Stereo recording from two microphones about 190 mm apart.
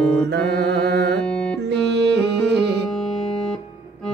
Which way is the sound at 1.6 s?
60° right (ahead or behind).